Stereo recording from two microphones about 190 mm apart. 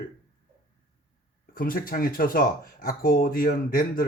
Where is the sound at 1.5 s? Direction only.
50° left (ahead or behind).